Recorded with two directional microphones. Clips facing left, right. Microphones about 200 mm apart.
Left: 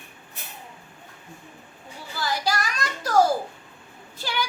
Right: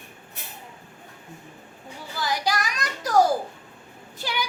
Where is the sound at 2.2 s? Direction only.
15° right (ahead or behind).